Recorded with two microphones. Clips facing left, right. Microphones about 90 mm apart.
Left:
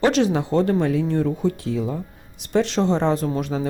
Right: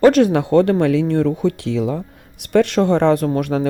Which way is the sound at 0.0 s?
50° right (ahead or behind).